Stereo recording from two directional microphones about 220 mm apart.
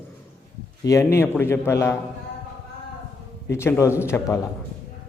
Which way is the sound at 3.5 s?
10° left (ahead or behind).